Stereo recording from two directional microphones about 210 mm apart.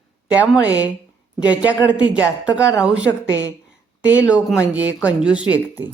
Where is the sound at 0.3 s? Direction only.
5° right (ahead or behind).